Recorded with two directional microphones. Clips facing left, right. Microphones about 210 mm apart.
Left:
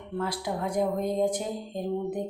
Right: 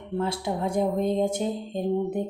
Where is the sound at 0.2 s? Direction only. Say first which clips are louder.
Right 3 dB; 25° right (ahead or behind).